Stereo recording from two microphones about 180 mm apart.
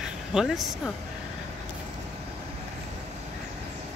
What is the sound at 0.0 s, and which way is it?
Speech, 5° right (ahead or behind).